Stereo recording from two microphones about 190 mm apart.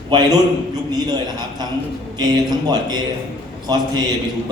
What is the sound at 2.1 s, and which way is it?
Speech, 20° right (ahead or behind).